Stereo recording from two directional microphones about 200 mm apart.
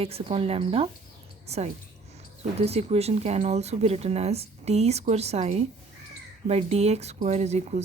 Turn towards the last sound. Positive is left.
turn(degrees=-35)  # may be behind; listen again after turning